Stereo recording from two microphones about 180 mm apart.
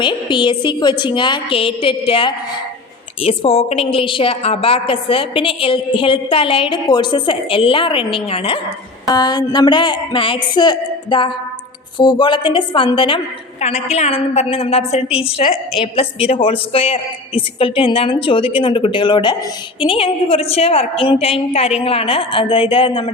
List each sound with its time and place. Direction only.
0.0 s a man's voice: 25° left (ahead or behind)